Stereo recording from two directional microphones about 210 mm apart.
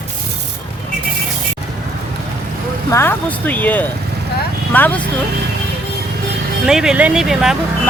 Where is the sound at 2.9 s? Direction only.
10° left (ahead or behind).